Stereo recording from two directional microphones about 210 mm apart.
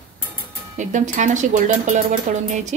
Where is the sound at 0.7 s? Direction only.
35° right (ahead or behind).